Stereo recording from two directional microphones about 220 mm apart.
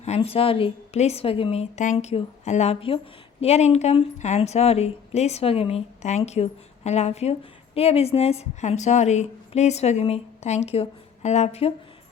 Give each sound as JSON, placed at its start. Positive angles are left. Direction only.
{"t": 0.0, "sound": "a woman's voice", "side_deg": 30}